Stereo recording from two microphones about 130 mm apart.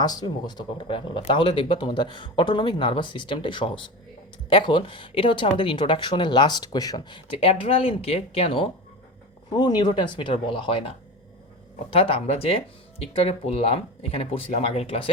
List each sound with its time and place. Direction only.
0.0 s speech: 30° left (ahead or behind); by 8.7 s 45° left (ahead or behind)
9.5 s speech: 35° left (ahead or behind)